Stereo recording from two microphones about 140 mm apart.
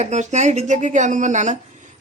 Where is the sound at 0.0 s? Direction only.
55° right (ahead or behind).